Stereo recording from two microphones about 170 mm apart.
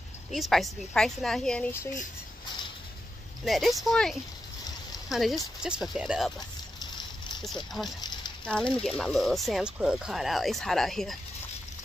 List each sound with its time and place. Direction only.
0.3 s speech: centre (ahead or behind)
3.4 s speech: centre (ahead or behind)
6.8 s a sound: 25° left (ahead or behind)
8.5 s speech: 5° left (ahead or behind)